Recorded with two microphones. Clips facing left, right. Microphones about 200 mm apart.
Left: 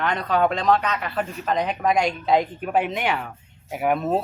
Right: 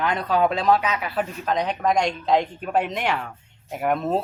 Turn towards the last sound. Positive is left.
turn(degrees=5)  # may be behind; listen again after turning